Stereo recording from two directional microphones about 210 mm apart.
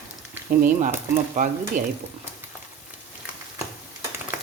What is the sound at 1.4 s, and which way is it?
Speech, 35° right (ahead or behind).